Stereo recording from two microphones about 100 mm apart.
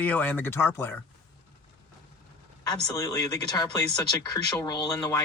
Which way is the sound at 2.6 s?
40° left (ahead or behind).